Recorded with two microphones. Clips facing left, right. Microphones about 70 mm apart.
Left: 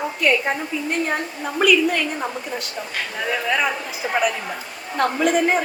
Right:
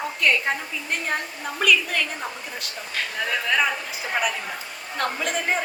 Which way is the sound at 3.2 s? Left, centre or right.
Centre.